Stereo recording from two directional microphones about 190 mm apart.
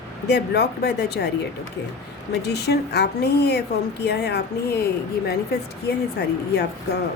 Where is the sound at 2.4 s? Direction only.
60° left (ahead or behind).